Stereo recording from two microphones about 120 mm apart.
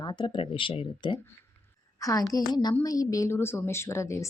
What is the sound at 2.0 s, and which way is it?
A woman's voice, 30° left (ahead or behind).